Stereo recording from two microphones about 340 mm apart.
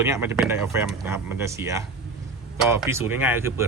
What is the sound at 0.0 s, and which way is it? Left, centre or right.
Speech, centre.